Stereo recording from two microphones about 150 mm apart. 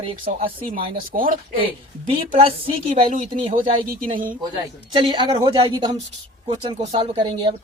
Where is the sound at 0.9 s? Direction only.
70° right (ahead or behind).